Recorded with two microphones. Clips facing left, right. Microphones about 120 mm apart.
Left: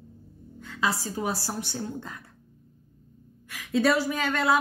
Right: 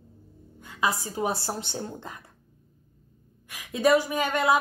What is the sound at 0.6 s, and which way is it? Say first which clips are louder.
Speech: right 1 dB; 15° right (ahead or behind).